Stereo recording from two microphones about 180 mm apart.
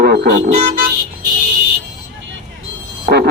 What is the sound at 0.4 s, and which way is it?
Speech, 40° right (ahead or behind).